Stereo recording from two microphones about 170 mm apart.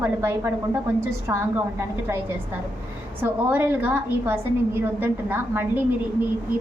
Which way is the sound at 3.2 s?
10° right (ahead or behind).